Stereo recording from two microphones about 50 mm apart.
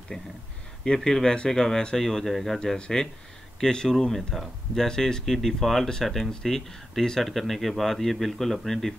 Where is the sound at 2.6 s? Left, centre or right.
Centre.